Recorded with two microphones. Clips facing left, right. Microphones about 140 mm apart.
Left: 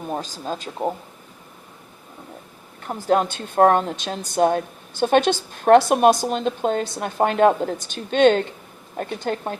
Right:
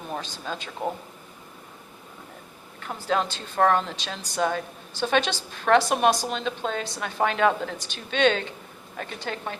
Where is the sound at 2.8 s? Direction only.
45° left (ahead or behind).